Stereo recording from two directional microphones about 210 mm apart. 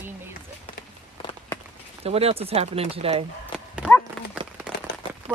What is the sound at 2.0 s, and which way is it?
Speech, 30° right (ahead or behind).